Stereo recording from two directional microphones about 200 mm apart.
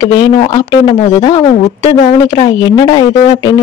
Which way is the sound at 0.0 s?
20° left (ahead or behind).